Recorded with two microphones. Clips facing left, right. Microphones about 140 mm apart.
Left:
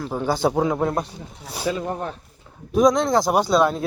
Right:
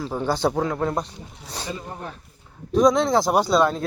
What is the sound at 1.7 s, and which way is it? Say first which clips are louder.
Speech: left 8 dB; 90° left.